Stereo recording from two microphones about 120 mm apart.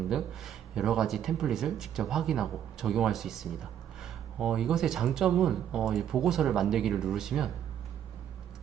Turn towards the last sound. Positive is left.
turn(degrees=-5)  # may be behind; listen again after turning